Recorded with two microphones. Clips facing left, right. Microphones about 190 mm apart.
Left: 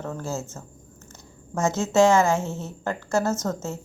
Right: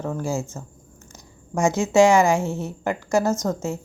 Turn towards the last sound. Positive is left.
turn(degrees=-10)  # may be behind; listen again after turning